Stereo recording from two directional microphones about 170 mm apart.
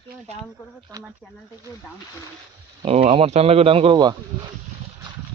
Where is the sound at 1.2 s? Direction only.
10° left (ahead or behind).